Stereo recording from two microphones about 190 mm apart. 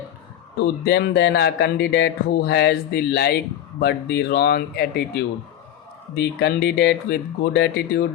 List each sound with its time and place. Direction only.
0.6 s speech: 60° left (ahead or behind)